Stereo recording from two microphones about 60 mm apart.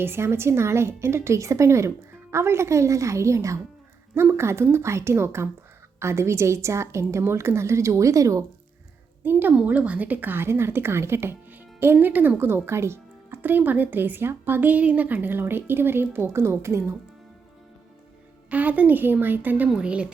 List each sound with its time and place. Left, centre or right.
0.0 s a woman's voice: right
4.1 s a woman's voice: right
9.2 s speech: right
9.6 s speech: right
11.9 s speech: right
13.4 s speech: right
18.5 s speech: right
19.7 s a woman's voice: centre